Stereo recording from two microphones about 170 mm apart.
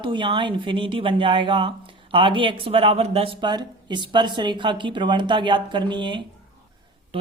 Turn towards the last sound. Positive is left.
turn(degrees=-25)  # may be behind; listen again after turning